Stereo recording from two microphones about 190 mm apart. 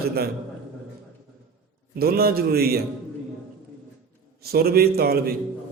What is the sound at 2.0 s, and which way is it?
Speech, 55° right (ahead or behind).